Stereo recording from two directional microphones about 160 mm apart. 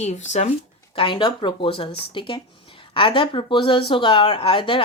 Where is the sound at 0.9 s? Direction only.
30° left (ahead or behind).